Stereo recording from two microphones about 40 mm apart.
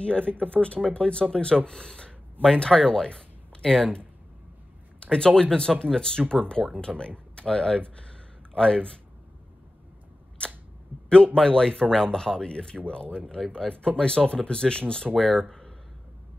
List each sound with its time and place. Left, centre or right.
0.3 s speech: left
2.9 s a sound: left
5.0 s speech: left
10.4 s camera: left
10.9 s a sound: right
11.3 s speech: centre